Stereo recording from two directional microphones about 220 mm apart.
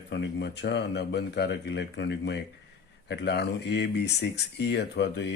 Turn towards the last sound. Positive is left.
turn(degrees=50)  # may be behind; listen again after turning